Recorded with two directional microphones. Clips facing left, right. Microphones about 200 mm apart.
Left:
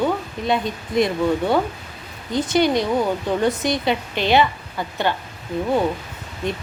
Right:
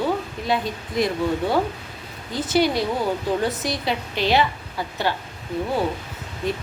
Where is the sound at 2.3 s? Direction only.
5° right (ahead or behind).